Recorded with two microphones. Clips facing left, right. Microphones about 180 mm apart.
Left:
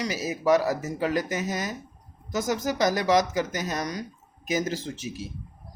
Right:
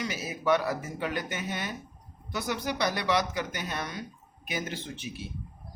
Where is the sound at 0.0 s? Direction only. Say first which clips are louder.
Left 5 dB; 40° left (ahead or behind).